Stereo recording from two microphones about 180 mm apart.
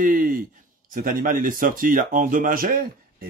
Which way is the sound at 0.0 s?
50° right (ahead or behind).